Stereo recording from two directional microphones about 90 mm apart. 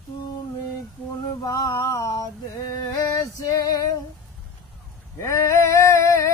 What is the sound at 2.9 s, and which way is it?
Female singing, 40° left (ahead or behind).